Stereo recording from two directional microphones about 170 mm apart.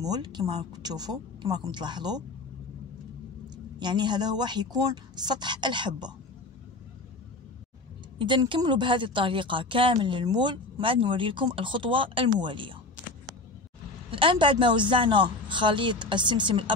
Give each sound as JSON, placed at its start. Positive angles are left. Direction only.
{"t": 0.0, "sound": "speech", "side_deg": -25}
{"t": 3.8, "sound": "speech", "side_deg": -25}
{"t": 8.2, "sound": "speech", "side_deg": -30}
{"t": 14.1, "sound": "speech", "side_deg": -30}